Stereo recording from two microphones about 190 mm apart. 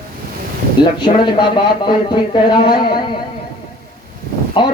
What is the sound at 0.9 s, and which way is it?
Music, 25° left (ahead or behind).